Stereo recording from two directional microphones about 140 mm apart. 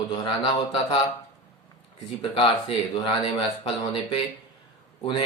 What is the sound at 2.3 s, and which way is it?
Speech, 40° left (ahead or behind).